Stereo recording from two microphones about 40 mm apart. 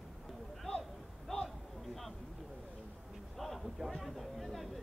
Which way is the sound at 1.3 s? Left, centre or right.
Centre.